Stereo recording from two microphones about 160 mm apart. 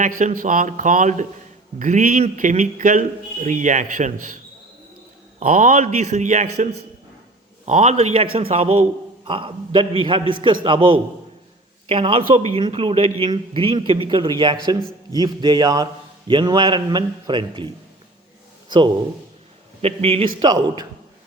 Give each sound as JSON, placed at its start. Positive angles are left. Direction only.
{"t": 0.0, "sound": "speech", "side_deg": -55}
{"t": 5.4, "sound": "a man's voice", "side_deg": -50}
{"t": 11.9, "sound": "a man's voice", "side_deg": -35}
{"t": 19.8, "sound": "a man's voice", "side_deg": -40}
{"t": 20.4, "sound": "a man's voice", "side_deg": -25}